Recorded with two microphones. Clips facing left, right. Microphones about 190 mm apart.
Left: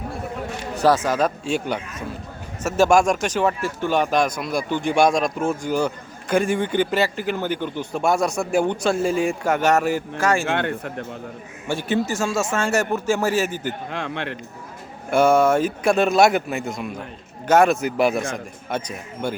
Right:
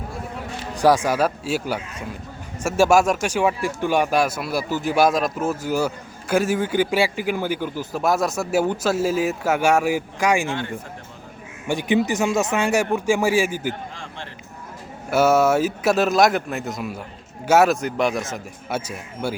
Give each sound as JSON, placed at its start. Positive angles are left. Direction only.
{"t": 0.8, "sound": "a man's voice", "side_deg": -10}
{"t": 10.4, "sound": "a man's voice", "side_deg": 65}
{"t": 11.7, "sound": "a man's voice", "side_deg": -15}
{"t": 13.9, "sound": "a man's voice", "side_deg": 65}
{"t": 15.1, "sound": "a man's voice", "side_deg": -5}
{"t": 17.7, "sound": "speech", "side_deg": 5}
{"t": 18.7, "sound": "a man's voice", "side_deg": -5}